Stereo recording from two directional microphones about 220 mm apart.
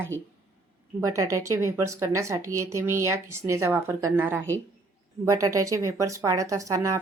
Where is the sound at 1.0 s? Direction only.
15° right (ahead or behind).